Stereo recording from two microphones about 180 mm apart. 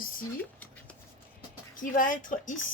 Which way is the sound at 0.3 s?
10° left (ahead or behind).